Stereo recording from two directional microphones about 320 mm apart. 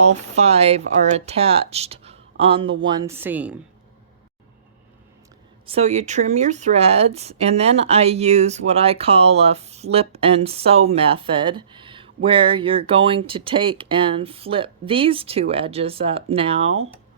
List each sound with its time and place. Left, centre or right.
0.0 s speech: centre
5.6 s speech: centre